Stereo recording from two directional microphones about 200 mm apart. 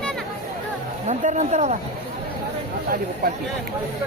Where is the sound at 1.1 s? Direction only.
35° right (ahead or behind).